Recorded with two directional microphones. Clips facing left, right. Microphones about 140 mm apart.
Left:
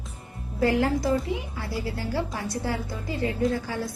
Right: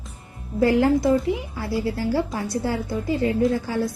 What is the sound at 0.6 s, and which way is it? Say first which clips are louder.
A woman's voice: right 5 dB; 25° right (ahead or behind).